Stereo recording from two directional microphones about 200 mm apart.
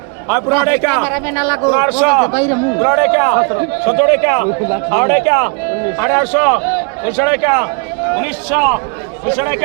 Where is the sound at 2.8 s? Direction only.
5° right (ahead or behind).